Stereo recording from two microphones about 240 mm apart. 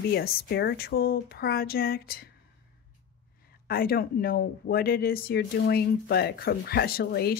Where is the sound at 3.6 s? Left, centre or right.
Left.